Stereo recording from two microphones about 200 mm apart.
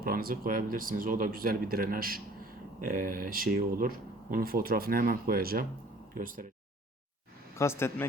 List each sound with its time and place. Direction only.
0.0 s speech: 45° right (ahead or behind)
7.6 s speech: 15° left (ahead or behind)